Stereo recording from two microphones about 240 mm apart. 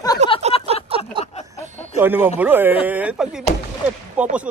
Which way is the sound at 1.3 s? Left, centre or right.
Left.